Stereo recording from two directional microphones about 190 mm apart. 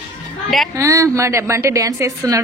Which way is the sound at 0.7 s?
15° right (ahead or behind).